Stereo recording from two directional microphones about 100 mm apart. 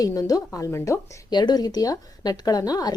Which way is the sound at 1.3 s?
45° left (ahead or behind).